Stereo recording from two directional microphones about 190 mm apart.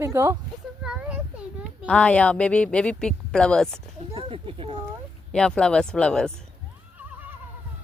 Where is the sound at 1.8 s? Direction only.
5° left (ahead or behind).